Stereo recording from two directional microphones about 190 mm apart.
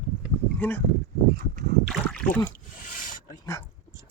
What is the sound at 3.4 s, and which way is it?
Dog, 15° left (ahead or behind).